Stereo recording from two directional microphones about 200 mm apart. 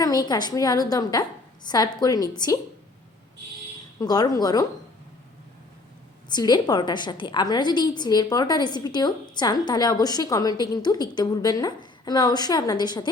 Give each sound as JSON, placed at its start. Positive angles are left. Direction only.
{"t": 0.0, "sound": "a woman's voice", "side_deg": 20}
{"t": 4.0, "sound": "a woman's voice", "side_deg": 20}
{"t": 6.2, "sound": "a woman's voice", "side_deg": 20}